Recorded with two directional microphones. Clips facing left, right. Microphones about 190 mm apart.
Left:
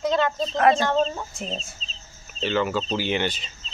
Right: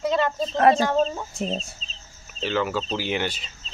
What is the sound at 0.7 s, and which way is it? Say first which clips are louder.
Speech: right 1 dB; 10° right (ahead or behind).